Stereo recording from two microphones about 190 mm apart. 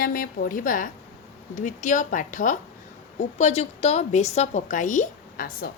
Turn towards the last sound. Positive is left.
turn(degrees=50)  # may be behind; listen again after turning